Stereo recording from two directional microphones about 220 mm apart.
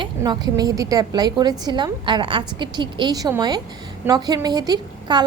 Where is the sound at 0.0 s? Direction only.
20° right (ahead or behind).